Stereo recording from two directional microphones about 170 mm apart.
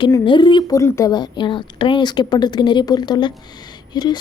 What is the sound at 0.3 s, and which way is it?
A woman's voice, 30° left (ahead or behind).